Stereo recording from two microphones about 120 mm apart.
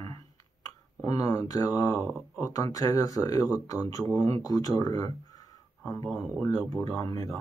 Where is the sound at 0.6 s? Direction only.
30° left (ahead or behind).